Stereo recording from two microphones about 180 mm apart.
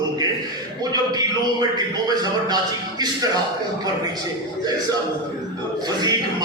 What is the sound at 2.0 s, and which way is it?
Speech, 20° right (ahead or behind).